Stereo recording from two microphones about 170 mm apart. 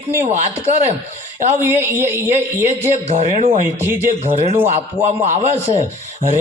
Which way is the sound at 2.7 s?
40° right (ahead or behind).